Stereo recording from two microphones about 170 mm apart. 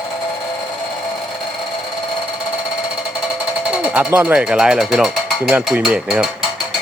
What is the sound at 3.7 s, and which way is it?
Speech, 5° right (ahead or behind).